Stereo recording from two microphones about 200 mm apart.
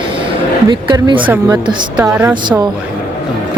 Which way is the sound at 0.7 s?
20° right (ahead or behind).